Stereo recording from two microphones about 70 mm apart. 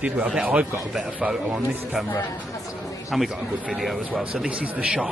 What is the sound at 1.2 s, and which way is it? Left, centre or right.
Speech, centre.